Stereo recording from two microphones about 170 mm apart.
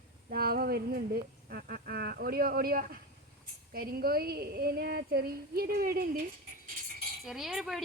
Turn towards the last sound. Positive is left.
turn(degrees=0)  # may be behind; listen again after turning